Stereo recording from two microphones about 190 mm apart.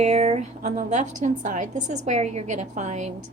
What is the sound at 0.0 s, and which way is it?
A woman's voice, 35° right (ahead or behind).